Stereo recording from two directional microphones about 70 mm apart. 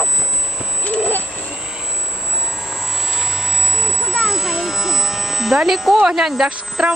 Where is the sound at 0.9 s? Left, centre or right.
Left.